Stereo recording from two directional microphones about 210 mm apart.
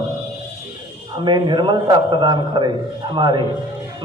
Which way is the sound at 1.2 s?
20° right (ahead or behind).